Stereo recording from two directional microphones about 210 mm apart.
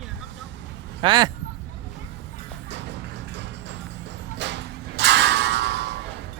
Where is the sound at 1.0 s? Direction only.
20° right (ahead or behind).